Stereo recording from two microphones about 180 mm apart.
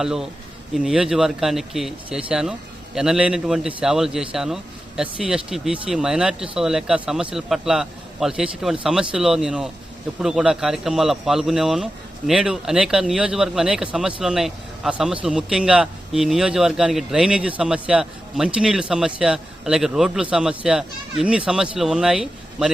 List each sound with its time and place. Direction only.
0.0 s speech: 5° right (ahead or behind)